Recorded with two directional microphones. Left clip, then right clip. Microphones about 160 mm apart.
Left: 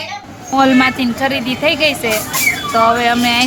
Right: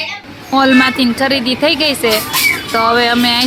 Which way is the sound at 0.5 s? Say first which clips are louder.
Right 1 dB; 25° right (ahead or behind).